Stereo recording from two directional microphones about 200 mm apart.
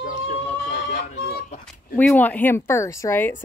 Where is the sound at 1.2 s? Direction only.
50° left (ahead or behind).